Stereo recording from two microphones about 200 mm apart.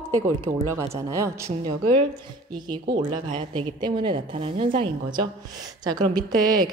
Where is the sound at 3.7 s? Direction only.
25° right (ahead or behind).